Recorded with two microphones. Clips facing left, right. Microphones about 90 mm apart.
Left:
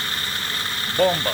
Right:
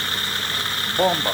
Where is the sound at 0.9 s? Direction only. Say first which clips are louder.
Left 1 dB; 30° right (ahead or behind).